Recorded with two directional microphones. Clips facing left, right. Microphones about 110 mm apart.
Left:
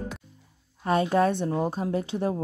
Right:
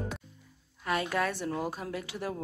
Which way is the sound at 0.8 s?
30° left (ahead or behind).